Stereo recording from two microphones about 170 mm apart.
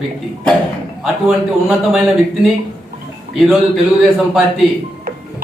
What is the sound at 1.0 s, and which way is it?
A man's voice, centre (ahead or behind).